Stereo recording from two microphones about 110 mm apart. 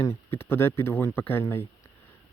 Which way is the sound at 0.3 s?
20° left (ahead or behind).